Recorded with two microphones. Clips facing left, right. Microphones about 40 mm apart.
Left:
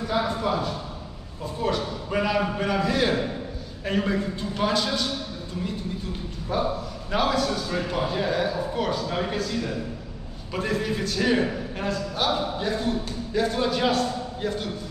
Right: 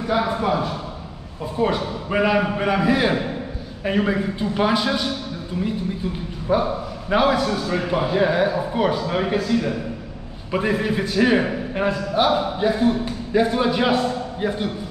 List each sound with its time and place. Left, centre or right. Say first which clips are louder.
0.0 s a man's voice: right 4 dB; right
6.5 s a man's voice: right 6 dB; centre